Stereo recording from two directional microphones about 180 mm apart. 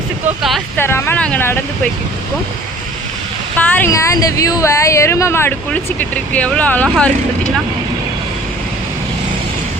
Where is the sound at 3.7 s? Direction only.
15° left (ahead or behind).